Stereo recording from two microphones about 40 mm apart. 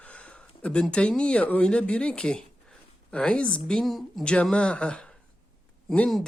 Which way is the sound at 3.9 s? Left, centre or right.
Centre.